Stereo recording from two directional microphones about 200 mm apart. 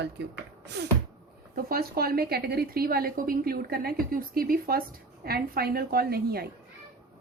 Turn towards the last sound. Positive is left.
turn(degrees=-50)  # may be behind; listen again after turning